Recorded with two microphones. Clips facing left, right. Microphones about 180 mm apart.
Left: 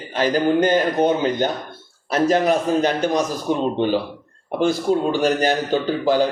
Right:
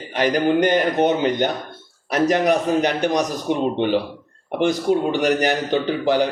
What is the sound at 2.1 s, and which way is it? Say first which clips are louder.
A man's voice: even; 15° right (ahead or behind).